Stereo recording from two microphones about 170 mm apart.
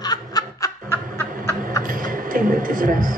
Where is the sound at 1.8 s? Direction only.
55° right (ahead or behind).